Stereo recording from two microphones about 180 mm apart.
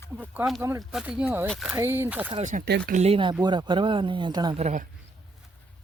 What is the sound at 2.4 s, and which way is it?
Speech, 45° right (ahead or behind).